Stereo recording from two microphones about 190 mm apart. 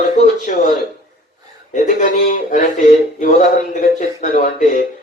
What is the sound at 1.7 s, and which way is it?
A man's voice, 40° left (ahead or behind).